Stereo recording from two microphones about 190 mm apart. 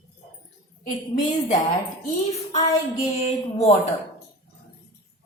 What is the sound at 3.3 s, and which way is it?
Speech, 35° left (ahead or behind).